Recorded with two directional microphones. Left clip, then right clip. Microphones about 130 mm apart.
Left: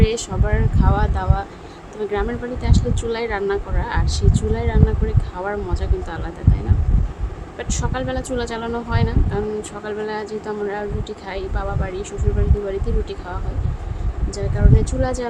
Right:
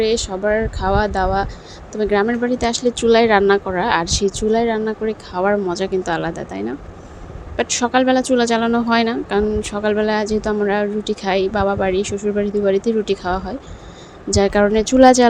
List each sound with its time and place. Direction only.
0.0 s speech: 25° right (ahead or behind); by 13.4 s 50° right (ahead or behind)
14.3 s speech: 75° right (ahead or behind)